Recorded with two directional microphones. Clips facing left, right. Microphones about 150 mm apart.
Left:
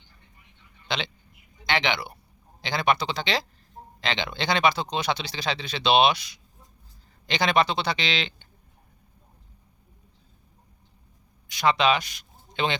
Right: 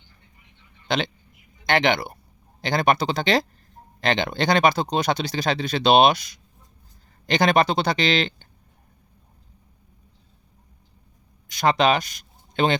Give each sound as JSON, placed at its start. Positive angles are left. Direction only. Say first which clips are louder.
{"t": 0.9, "sound": "speech", "louder": "right 6 dB", "side_deg": -45}
{"t": 11.4, "sound": "speech", "louder": "right 3 dB", "side_deg": -45}